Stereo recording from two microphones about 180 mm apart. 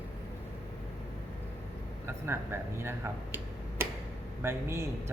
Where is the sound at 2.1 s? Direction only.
15° right (ahead or behind).